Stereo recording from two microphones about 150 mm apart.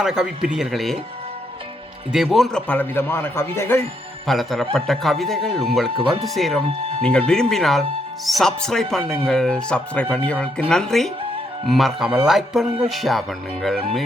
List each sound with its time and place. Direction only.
0.0 s speech: 5° right (ahead or behind)
2.1 s a man's voice: centre (ahead or behind); by 3.8 s 15° left (ahead or behind)
4.3 s a man's voice: centre (ahead or behind)